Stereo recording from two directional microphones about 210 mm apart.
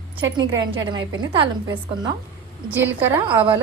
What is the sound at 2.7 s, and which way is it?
Speech, 10° right (ahead or behind).